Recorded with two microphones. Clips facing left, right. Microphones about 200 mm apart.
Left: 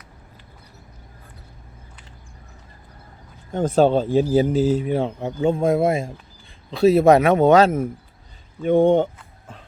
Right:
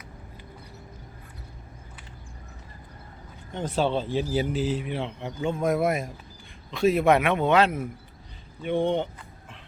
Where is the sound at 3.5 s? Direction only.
45° left (ahead or behind).